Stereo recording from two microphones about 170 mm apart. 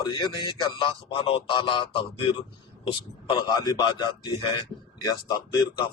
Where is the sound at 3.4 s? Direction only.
25° left (ahead or behind).